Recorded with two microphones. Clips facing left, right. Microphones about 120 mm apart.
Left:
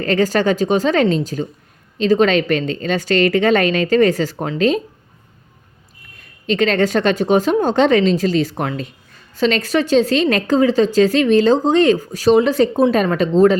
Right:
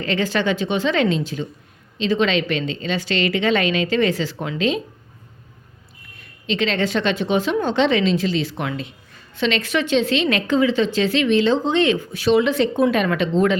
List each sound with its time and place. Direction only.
0.0 s a woman's voice: 45° left (ahead or behind)
6.1 s a woman's voice: 45° left (ahead or behind)